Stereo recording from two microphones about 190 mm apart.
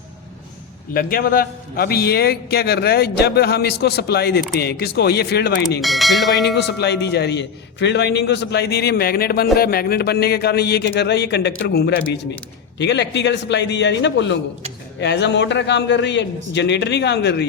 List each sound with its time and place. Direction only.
0.9 s a man's voice: 50° left (ahead or behind)
5.8 s speech: centre (ahead or behind)
6.5 s a man's voice: 60° left (ahead or behind)